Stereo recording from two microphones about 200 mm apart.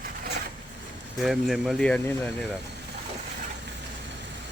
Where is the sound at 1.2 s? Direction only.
Centre (ahead or behind).